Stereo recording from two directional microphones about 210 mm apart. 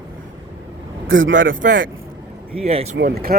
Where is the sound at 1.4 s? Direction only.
40° right (ahead or behind).